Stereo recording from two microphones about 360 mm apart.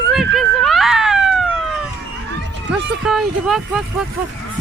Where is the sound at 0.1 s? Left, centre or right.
Centre.